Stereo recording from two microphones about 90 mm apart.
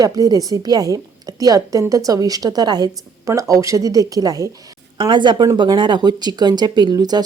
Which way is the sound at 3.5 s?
35° right (ahead or behind).